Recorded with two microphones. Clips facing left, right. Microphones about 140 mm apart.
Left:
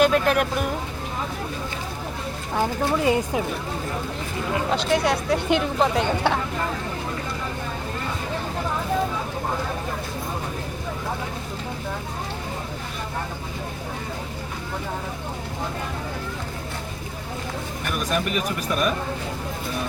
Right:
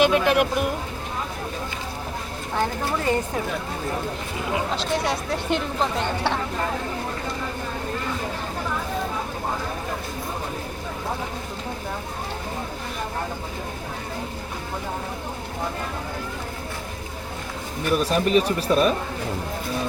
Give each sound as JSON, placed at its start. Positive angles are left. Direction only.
{"t": 0.0, "sound": "speech", "side_deg": -5}
{"t": 2.6, "sound": "speech", "side_deg": 10}
{"t": 4.8, "sound": "speech", "side_deg": 0}
{"t": 17.9, "sound": "speech", "side_deg": -30}